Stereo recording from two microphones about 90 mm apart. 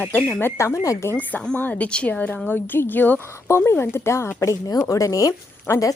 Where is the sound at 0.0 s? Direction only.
15° left (ahead or behind); by 1.1 s 35° left (ahead or behind).